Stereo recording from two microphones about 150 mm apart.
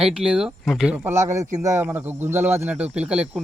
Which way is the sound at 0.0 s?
5° right (ahead or behind).